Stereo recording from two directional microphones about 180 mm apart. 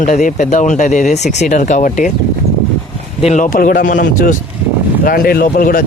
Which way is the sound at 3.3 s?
50° left (ahead or behind).